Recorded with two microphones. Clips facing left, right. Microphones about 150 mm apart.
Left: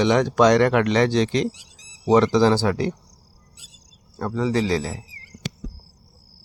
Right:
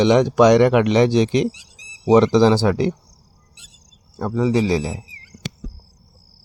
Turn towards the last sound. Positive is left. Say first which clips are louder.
# right 3 dB
turn(degrees=-15)  # may be behind; listen again after turning